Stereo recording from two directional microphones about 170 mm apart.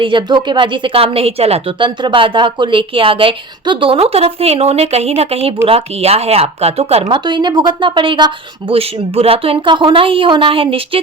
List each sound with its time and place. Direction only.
0.0 s a woman's voice: 30° right (ahead or behind)
7.0 s a woman's voice: 25° right (ahead or behind)